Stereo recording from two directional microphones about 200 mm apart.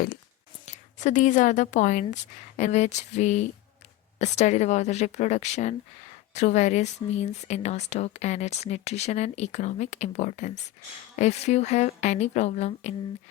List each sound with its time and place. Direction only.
0.6 s speech: 35° left (ahead or behind)